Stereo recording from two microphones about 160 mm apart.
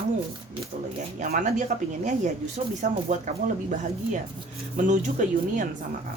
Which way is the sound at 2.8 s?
50° right (ahead or behind).